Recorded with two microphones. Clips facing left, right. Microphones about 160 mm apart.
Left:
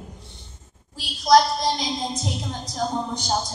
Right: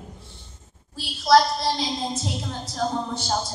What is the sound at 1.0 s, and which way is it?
A woman's voice, 15° left (ahead or behind).